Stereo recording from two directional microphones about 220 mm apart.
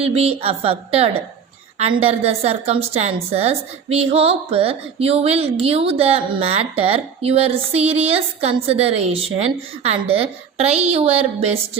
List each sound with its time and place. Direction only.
0.0 s a woman's voice: 25° right (ahead or behind)